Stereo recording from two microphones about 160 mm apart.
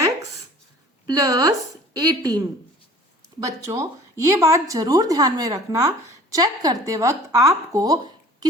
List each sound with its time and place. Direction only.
1.0 s a woman's voice: 25° right (ahead or behind)